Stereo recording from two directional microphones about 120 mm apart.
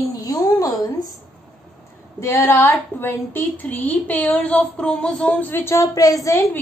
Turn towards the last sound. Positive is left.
turn(degrees=25)  # may be behind; listen again after turning